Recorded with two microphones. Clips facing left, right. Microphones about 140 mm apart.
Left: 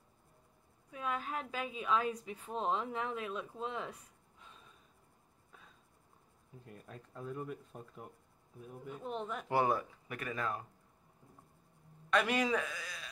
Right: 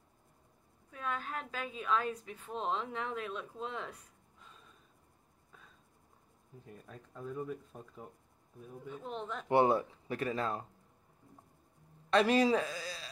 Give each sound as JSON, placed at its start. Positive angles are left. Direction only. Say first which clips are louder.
{"t": 0.9, "sound": "a woman's voice", "louder": "left 1 dB", "side_deg": 5}
{"t": 6.7, "sound": "a woman's voice", "louder": "even", "side_deg": 5}
{"t": 9.5, "sound": "speech", "louder": "right 5 dB", "side_deg": -30}
{"t": 12.1, "sound": "speech", "louder": "right 5 dB", "side_deg": -30}